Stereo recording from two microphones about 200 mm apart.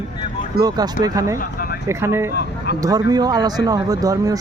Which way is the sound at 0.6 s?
20° right (ahead or behind).